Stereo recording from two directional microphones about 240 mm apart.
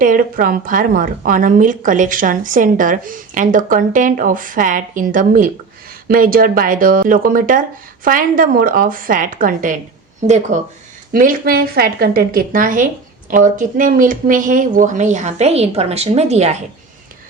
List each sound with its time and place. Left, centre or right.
0.0 s a woman's voice: right